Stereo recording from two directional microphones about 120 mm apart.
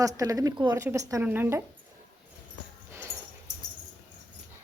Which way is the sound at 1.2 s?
15° right (ahead or behind).